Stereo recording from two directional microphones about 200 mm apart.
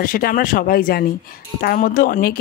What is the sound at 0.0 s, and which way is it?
Speech, 45° left (ahead or behind).